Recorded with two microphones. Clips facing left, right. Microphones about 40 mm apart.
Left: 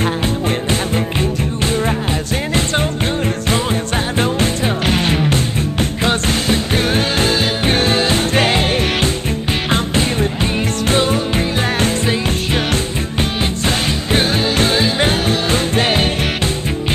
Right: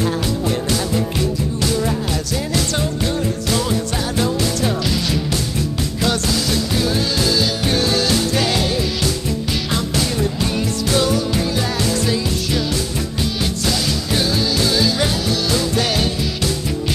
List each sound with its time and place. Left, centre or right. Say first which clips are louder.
0.0 s music: left 2 dB; left